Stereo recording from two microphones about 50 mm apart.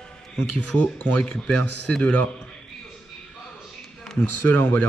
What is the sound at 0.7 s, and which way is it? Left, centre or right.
Speech, left.